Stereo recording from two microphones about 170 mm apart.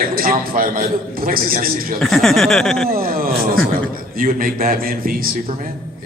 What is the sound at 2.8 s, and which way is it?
A man's voice, 60° right (ahead or behind).